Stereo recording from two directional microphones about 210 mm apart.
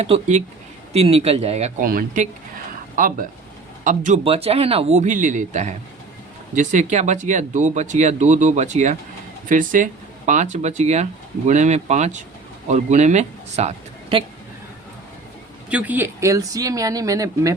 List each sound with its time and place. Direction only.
0.0 s speech: 30° right (ahead or behind)
15.7 s speech: 10° right (ahead or behind)